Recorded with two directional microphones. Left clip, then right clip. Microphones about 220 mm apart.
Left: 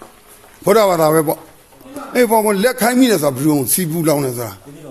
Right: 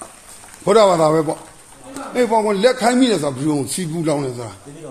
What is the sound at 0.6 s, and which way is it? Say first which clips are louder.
A man's voice: even; 35° left (ahead or behind).